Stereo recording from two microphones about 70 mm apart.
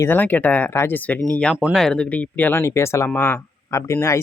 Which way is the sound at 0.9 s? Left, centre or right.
Left.